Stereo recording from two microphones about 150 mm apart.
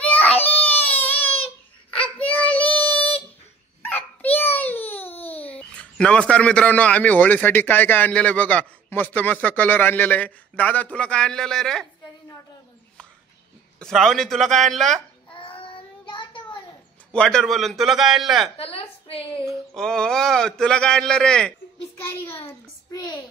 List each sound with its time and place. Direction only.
0.0 s baby cry: 10° left (ahead or behind)
2.2 s child singing: 10° left (ahead or behind)
3.9 s a child's voice: 10° left (ahead or behind)
13.7 s speech: 5° left (ahead or behind)
15.3 s child singing: 35° left (ahead or behind)
17.1 s speech: 5° left (ahead or behind)
18.6 s a sound: 40° left (ahead or behind)
19.7 s speech: 5° left (ahead or behind)
22.0 s a child's voice: 15° left (ahead or behind)